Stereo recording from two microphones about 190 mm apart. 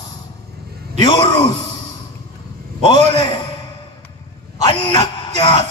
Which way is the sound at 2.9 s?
25° left (ahead or behind).